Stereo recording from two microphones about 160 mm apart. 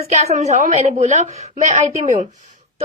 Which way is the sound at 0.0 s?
40° right (ahead or behind).